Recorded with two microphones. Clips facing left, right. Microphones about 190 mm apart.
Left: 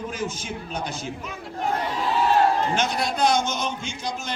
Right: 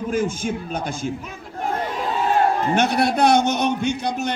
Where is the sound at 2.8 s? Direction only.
65° right (ahead or behind).